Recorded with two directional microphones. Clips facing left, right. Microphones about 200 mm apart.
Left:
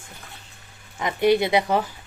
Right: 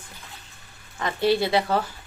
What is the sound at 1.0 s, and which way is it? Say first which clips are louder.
Speech: left 3 dB; 20° left (ahead or behind).